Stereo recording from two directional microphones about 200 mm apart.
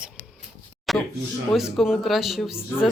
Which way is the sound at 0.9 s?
Centre (ahead or behind).